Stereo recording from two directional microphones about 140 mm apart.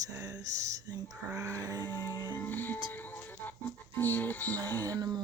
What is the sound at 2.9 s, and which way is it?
Speech, 15° left (ahead or behind).